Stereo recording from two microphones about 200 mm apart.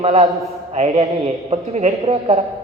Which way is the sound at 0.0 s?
35° right (ahead or behind).